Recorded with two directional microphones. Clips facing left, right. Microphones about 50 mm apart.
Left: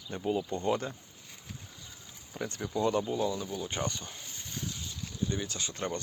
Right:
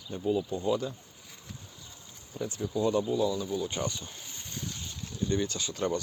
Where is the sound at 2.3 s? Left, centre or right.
Left.